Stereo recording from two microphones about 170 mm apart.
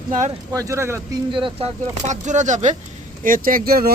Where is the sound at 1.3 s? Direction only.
30° right (ahead or behind).